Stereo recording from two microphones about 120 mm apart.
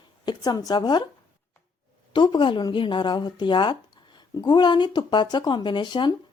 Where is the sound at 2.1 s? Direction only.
40° left (ahead or behind).